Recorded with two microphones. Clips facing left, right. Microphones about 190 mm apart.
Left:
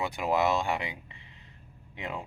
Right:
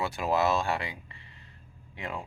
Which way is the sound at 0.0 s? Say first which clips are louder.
Even; 15° left (ahead or behind).